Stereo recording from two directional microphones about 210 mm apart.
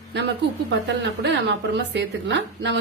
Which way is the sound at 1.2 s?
55° right (ahead or behind).